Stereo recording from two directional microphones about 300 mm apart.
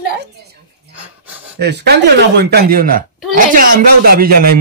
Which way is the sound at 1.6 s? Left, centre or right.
Right.